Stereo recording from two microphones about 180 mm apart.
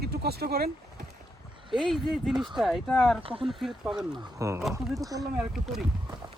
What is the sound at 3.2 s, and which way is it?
Speech, 30° right (ahead or behind).